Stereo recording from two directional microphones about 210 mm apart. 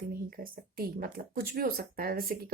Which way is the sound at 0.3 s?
45° right (ahead or behind).